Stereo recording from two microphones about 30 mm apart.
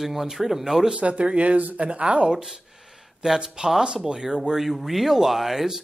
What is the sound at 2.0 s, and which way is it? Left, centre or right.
Speech, right.